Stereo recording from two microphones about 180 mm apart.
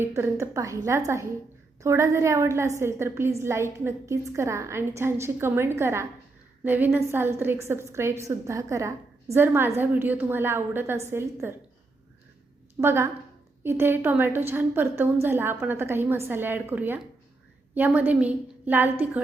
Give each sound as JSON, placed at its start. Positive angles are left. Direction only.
{"t": 0.0, "sound": "a woman's voice", "side_deg": -15}
{"t": 12.8, "sound": "a woman's voice", "side_deg": -15}